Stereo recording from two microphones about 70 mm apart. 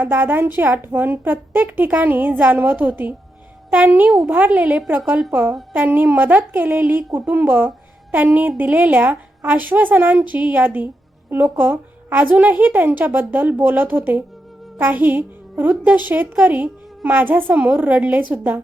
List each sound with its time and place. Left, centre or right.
0.0 s a woman's voice: right